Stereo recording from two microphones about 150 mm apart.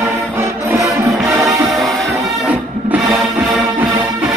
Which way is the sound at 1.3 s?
Centre (ahead or behind).